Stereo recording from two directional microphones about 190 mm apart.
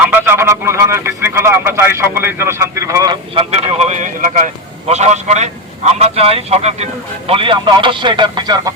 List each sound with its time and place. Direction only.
0.0 s speech: 10° right (ahead or behind)